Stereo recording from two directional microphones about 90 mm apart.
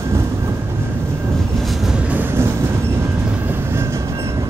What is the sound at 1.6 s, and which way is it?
Train, centre (ahead or behind).